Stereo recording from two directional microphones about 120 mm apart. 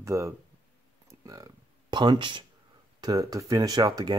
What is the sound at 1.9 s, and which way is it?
Speech, 40° right (ahead or behind).